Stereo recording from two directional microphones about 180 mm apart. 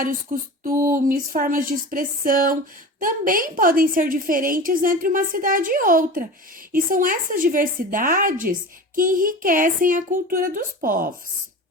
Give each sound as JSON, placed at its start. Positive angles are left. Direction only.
{"t": 0.6, "sound": "a woman's voice", "side_deg": -50}